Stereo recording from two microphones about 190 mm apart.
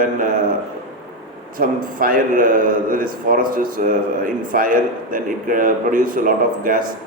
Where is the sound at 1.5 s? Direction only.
50° right (ahead or behind).